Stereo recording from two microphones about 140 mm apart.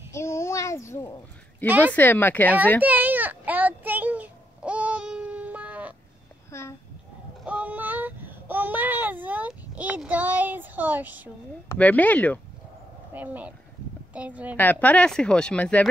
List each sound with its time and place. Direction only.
0.1 s a sound: 20° left (ahead or behind)
1.7 s a woman's voice: 10° right (ahead or behind)
2.0 s speech: 15° left (ahead or behind)
2.8 s a sound: 10° right (ahead or behind)
7.4 s child singing: 10° right (ahead or behind)
11.7 s speech: 10° left (ahead or behind)
13.1 s a woman's voice: 10° right (ahead or behind)
14.6 s speech: 10° left (ahead or behind)